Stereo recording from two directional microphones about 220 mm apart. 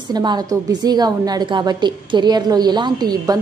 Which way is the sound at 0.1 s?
20° right (ahead or behind).